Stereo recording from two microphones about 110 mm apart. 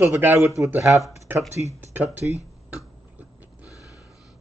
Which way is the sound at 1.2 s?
25° right (ahead or behind).